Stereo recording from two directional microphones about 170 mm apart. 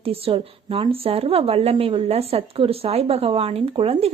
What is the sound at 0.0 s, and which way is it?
A woman's voice, 35° right (ahead or behind).